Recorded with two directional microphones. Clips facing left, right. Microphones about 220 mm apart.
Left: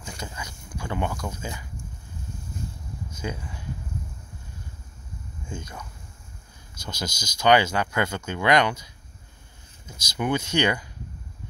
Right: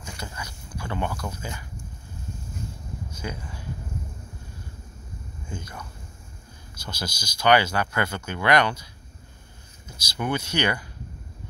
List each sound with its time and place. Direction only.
0.0 s a sound: 15° left (ahead or behind)
1.2 s speech: 15° left (ahead or behind)
3.2 s speech: 20° left (ahead or behind)
5.5 s speech: 20° left (ahead or behind)
6.9 s speech: 20° left (ahead or behind)
10.1 s speech: 15° left (ahead or behind)